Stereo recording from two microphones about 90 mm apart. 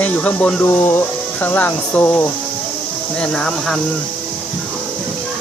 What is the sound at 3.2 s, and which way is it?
Speech, 5° left (ahead or behind).